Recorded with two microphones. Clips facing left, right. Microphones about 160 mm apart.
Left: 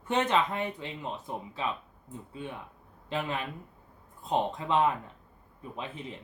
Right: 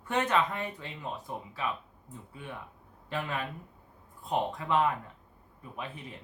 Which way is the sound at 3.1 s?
20° left (ahead or behind).